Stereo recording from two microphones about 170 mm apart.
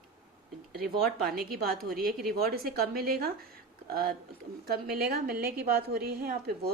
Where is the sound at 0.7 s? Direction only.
65° right (ahead or behind).